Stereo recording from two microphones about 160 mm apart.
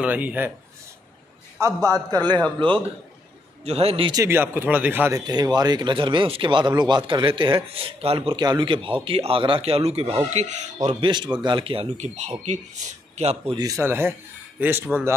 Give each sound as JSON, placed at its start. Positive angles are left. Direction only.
{"t": 0.0, "sound": "speech", "side_deg": -10}
{"t": 1.6, "sound": "a man's voice", "side_deg": -20}
{"t": 3.6, "sound": "a man's voice", "side_deg": -40}
{"t": 4.1, "sound": "speech", "side_deg": -15}
{"t": 5.2, "sound": "a man's voice", "side_deg": -25}
{"t": 11.0, "sound": "a man's voice", "side_deg": -30}
{"t": 13.8, "sound": "speech", "side_deg": -15}